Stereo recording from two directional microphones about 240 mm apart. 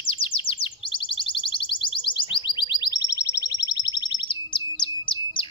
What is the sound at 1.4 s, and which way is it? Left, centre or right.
Music, left.